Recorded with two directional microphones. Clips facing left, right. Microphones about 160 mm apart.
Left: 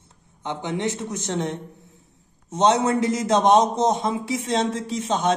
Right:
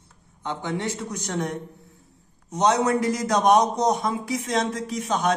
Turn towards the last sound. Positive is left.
turn(degrees=25)  # may be behind; listen again after turning